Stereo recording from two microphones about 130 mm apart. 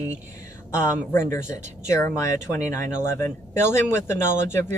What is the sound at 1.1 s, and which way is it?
Speech, 20° left (ahead or behind).